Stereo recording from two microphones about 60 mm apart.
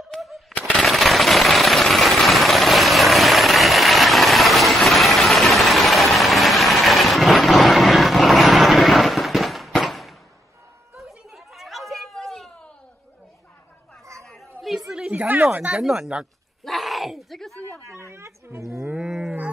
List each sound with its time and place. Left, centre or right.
0.1 s a sound: centre
11.0 s chatter: centre
14.6 s chatter: centre
15.0 s a sound: right
15.7 s speech: centre
16.6 s groan: centre
17.9 s speech: right
19.0 s cattle: centre